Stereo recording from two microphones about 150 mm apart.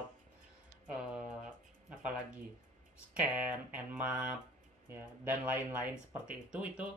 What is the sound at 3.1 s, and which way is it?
Speech, 10° right (ahead or behind).